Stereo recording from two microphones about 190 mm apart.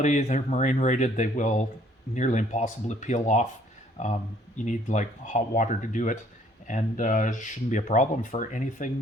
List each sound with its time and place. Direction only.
0.0 s speech: 35° left (ahead or behind)